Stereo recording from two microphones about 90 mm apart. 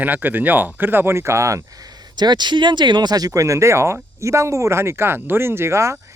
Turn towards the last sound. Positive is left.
turn(degrees=-30)  # may be behind; listen again after turning